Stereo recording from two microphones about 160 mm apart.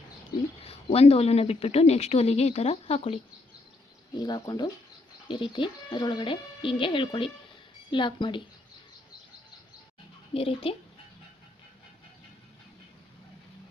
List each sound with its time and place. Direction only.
0.6 s speech: 40° left (ahead or behind)
4.2 s speech: 25° left (ahead or behind)
10.3 s speech: 35° left (ahead or behind)